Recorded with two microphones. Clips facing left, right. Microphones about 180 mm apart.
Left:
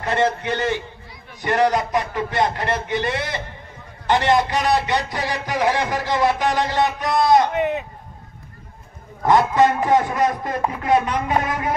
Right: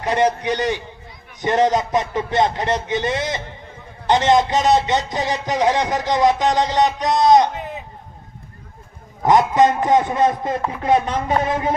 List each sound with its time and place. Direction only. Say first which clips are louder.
0.0 s a man's voice: right 2 dB; 15° right (ahead or behind)
7.5 s speech: left 9 dB; 70° left (ahead or behind)
9.2 s a man's voice: right 1 dB; 20° right (ahead or behind)